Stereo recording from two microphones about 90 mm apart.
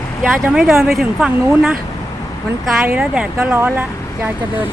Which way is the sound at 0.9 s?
5° right (ahead or behind).